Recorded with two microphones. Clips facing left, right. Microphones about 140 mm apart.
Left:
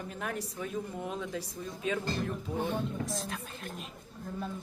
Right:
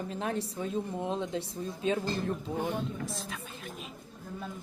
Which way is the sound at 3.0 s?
Centre (ahead or behind).